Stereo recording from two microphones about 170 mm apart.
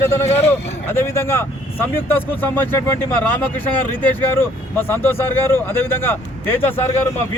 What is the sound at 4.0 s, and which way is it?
Speech, 10° left (ahead or behind).